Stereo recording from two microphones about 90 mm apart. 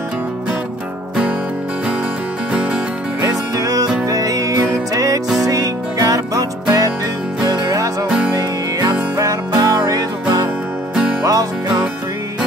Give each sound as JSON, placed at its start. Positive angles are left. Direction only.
{"t": 2.5, "sound": "music", "side_deg": -15}
{"t": 3.3, "sound": "music", "side_deg": -40}
{"t": 9.1, "sound": "music", "side_deg": -45}
{"t": 11.2, "sound": "music", "side_deg": -45}